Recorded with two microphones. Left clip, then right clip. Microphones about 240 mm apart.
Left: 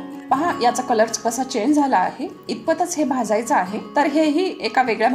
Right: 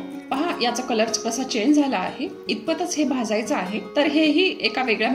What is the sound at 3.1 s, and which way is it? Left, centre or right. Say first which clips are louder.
Music: left 4 dB; left.